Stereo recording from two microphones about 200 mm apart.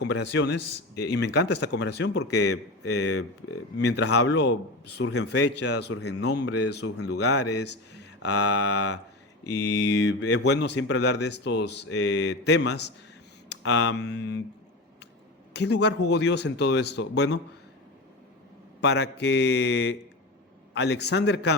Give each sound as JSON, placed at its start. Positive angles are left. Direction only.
{"t": 0.1, "sound": "speech", "side_deg": 60}
{"t": 2.8, "sound": "speech", "side_deg": 90}
{"t": 4.9, "sound": "speech", "side_deg": 75}
{"t": 9.5, "sound": "mantra", "side_deg": 15}
{"t": 10.0, "sound": "speech", "side_deg": 60}
{"t": 15.5, "sound": "speech", "side_deg": 60}
{"t": 18.8, "sound": "speech", "side_deg": 60}